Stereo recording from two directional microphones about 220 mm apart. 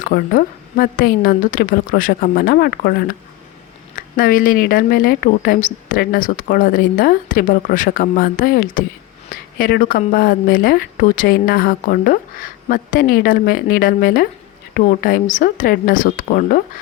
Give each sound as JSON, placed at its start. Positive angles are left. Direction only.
{"t": 0.0, "sound": "speech", "side_deg": 40}
{"t": 3.9, "sound": "speech", "side_deg": 40}